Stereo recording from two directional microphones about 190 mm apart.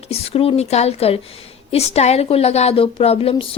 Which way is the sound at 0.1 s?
30° left (ahead or behind).